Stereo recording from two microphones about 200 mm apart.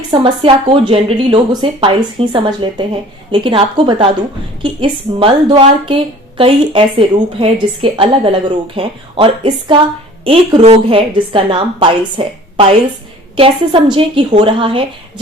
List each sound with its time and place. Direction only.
0.1 s a woman's voice: 25° right (ahead or behind)